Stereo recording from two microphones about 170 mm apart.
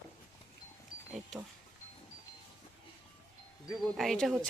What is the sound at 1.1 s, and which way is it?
Power windows, 5° right (ahead or behind).